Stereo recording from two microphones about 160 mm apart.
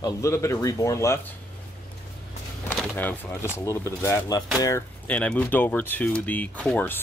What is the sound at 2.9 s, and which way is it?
Speech, 10° left (ahead or behind).